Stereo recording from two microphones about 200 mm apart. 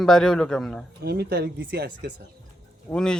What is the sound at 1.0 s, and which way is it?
Speech, 50° right (ahead or behind).